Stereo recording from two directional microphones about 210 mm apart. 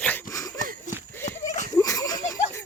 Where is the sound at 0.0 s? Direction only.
10° left (ahead or behind).